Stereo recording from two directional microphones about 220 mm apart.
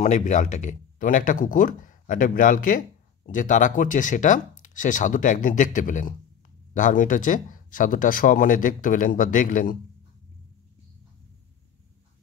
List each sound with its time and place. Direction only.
0.0 s speech: 35° left (ahead or behind)